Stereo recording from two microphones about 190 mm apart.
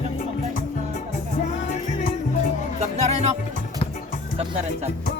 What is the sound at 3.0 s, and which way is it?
Music, 35° right (ahead or behind).